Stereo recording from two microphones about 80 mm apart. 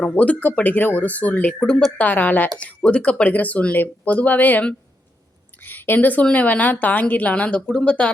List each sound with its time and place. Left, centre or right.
0.0 s a woman's voice: centre